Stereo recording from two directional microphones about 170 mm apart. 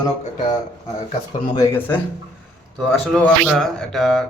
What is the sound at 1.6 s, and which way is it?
Speech, 10° left (ahead or behind).